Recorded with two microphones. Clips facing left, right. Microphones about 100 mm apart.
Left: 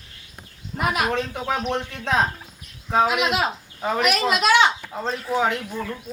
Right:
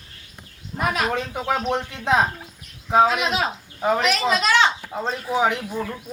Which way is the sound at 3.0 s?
5° left (ahead or behind).